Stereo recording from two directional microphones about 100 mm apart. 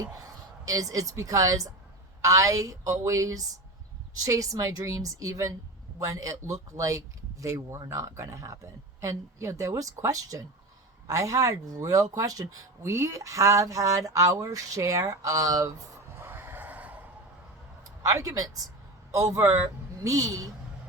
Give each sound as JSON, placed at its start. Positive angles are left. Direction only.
{"t": 0.7, "sound": "speech", "side_deg": -35}
{"t": 16.1, "sound": "a sound", "side_deg": -20}
{"t": 17.8, "sound": "speech", "side_deg": -35}